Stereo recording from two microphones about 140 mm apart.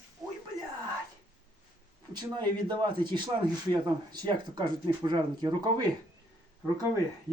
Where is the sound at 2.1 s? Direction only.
30° right (ahead or behind).